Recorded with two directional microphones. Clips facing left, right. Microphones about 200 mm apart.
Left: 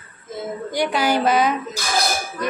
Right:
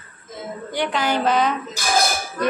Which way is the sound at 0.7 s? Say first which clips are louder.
Left 2 dB; 10° left (ahead or behind).